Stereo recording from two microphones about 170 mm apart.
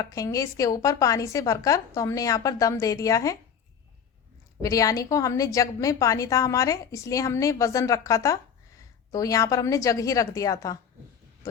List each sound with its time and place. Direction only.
0.0 s a woman's voice: 20° left (ahead or behind)
4.6 s a woman's voice: 20° left (ahead or behind)